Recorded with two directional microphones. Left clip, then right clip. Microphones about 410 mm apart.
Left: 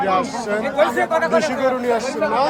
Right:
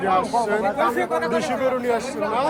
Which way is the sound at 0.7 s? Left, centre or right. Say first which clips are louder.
Left 4 dB; left.